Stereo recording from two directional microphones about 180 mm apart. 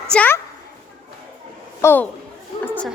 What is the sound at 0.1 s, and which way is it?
Speech, 10° left (ahead or behind).